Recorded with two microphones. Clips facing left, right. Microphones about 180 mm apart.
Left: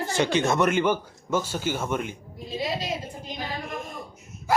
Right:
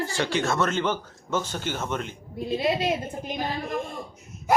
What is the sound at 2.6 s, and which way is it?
Speech, 60° right (ahead or behind).